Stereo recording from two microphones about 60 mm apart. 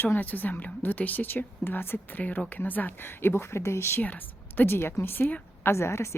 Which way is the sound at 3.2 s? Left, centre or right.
Left.